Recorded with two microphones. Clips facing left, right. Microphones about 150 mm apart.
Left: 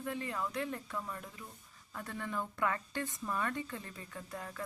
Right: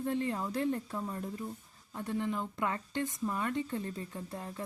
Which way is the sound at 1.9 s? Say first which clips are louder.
Right 5 dB; 20° right (ahead or behind).